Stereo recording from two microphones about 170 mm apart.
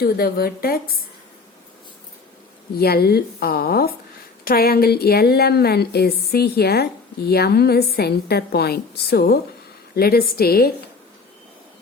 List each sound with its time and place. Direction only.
0.0 s a woman's voice: 65° left (ahead or behind)
2.7 s a woman's voice: 65° left (ahead or behind)